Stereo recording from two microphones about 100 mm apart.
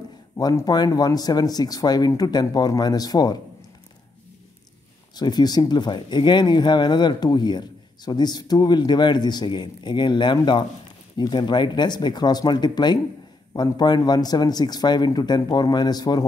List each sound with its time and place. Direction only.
0.7 s speech: 40° left (ahead or behind)
5.1 s speech: 45° left (ahead or behind)